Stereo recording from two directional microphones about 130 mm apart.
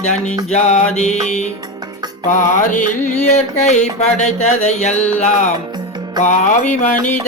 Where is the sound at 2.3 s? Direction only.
75° left (ahead or behind); by 4.9 s 60° left (ahead or behind).